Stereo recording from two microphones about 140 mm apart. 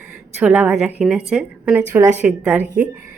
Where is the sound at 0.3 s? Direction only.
10° right (ahead or behind).